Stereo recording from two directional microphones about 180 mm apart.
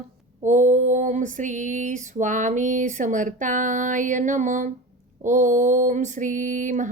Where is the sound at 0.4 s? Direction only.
45° right (ahead or behind).